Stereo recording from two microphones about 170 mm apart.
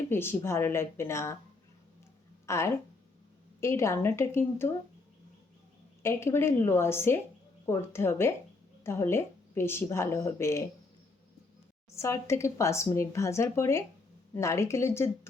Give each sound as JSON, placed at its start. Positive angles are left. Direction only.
{"t": 0.1, "sound": "speech", "side_deg": 15}
{"t": 2.5, "sound": "speech", "side_deg": 15}
{"t": 6.0, "sound": "speech", "side_deg": 15}
{"t": 11.9, "sound": "speech", "side_deg": 15}